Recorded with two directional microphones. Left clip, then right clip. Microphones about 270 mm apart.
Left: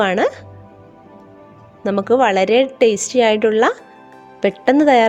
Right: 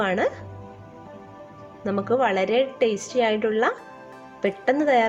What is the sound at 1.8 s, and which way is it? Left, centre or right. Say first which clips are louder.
A woman's voice: left 8 dB; left.